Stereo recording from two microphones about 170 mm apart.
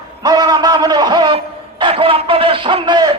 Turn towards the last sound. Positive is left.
turn(degrees=-25)  # may be behind; listen again after turning